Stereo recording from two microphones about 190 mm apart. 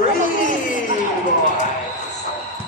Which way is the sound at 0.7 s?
45° left (ahead or behind).